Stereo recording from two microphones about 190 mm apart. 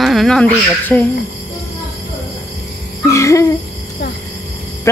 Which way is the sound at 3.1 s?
15° left (ahead or behind).